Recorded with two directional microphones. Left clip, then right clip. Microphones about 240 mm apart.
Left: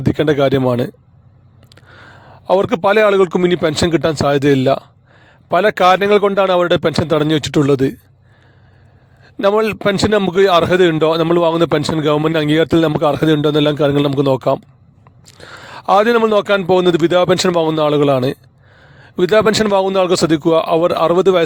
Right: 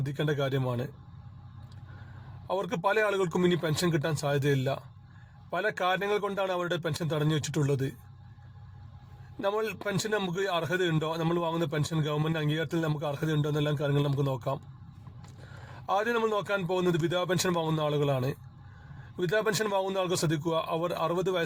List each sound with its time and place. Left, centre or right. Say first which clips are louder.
0.0 s a man's voice: left 17 dB; left
2.5 s a man's voice: left 16 dB; left
9.4 s a man's voice: left 17 dB; left
15.9 s a man's voice: left 16 dB; left